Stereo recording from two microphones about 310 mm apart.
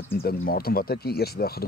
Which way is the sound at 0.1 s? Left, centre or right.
Left.